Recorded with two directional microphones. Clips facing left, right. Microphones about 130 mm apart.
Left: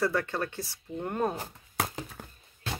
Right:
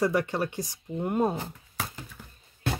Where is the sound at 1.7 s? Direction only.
90° left.